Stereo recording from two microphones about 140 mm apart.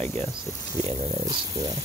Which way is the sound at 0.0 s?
50° right (ahead or behind).